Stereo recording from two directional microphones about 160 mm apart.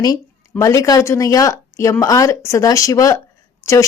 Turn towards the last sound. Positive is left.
turn(degrees=20)  # may be behind; listen again after turning